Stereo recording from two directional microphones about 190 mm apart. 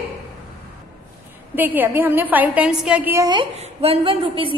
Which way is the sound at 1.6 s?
10° right (ahead or behind).